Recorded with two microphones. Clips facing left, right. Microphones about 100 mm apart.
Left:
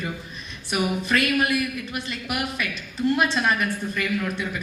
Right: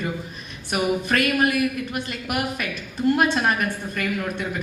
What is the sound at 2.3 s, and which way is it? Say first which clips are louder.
A man's voice: right 2 dB; 45° right (ahead or behind).